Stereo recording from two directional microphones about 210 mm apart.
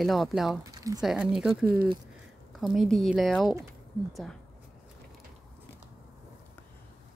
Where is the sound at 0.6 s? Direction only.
15° right (ahead or behind).